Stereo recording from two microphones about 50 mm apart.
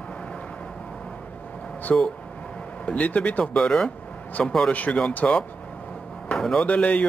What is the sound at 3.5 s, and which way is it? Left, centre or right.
Speech, centre.